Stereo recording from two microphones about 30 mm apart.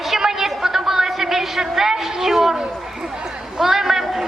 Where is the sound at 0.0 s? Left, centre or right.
Centre.